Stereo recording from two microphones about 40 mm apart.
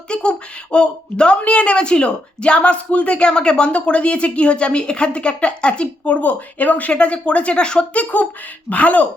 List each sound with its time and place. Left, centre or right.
0.1 s speech: left
7.9 s speech: left